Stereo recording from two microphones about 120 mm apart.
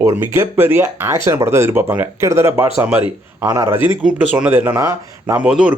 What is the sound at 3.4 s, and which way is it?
Speech, 25° right (ahead or behind).